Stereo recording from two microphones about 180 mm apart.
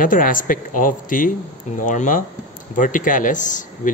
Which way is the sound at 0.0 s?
50° left (ahead or behind).